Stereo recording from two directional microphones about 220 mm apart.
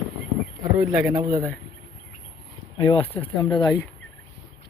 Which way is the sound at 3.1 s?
10° left (ahead or behind).